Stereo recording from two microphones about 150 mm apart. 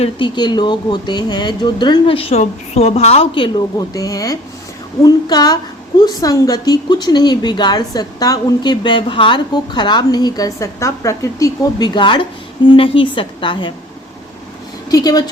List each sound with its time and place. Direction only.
0.0 s a woman's voice: 30° left (ahead or behind)
14.8 s speech: 25° left (ahead or behind)